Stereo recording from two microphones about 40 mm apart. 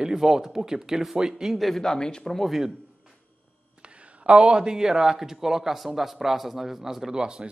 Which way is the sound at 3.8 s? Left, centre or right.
Right.